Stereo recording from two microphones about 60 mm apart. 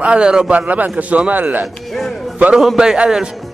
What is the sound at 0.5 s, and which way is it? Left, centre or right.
A man's voice, right.